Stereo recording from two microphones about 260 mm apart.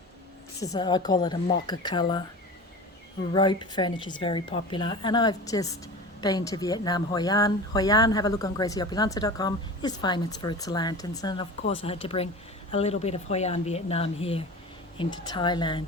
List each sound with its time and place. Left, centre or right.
0.6 s speech: centre
3.3 s speech: centre